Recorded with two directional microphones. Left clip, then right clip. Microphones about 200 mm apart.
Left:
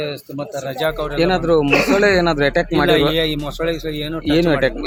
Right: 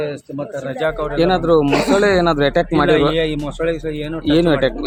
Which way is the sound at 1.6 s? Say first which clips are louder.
Even; 20° right (ahead or behind).